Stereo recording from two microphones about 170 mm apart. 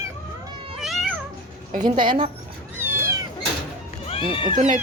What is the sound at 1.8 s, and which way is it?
Speech, 25° right (ahead or behind).